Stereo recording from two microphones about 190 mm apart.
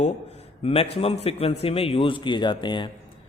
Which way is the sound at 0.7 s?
30° left (ahead or behind).